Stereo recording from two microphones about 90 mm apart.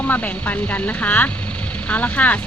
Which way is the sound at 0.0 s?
15° left (ahead or behind).